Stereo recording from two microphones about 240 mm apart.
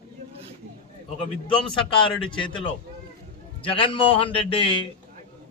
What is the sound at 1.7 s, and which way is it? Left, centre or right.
Speech, left.